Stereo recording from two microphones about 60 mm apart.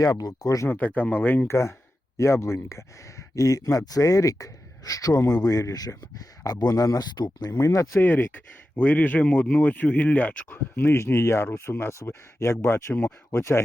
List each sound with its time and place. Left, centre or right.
0.0 s speech: left
0.7 s speech: left
1.5 s speech: left
6.4 s speech: left
7.6 s speech: left
8.0 s speech: left
10.5 s speech: left
13.3 s speech: left